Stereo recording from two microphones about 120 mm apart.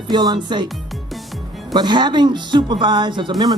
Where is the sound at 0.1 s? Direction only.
35° right (ahead or behind).